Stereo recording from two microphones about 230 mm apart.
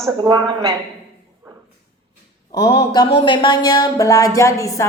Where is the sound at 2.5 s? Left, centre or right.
Centre.